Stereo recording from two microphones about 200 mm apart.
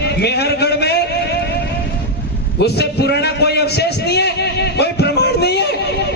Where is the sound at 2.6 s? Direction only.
55° left (ahead or behind).